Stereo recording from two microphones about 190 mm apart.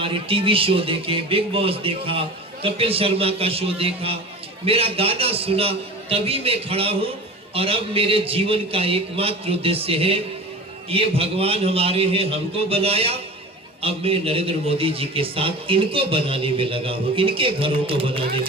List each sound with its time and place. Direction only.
0.0 s a man's voice: 30° right (ahead or behind)